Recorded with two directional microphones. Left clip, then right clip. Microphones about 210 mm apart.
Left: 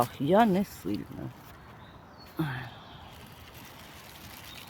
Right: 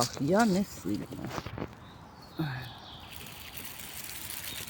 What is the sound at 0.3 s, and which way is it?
Speech, 20° left (ahead or behind).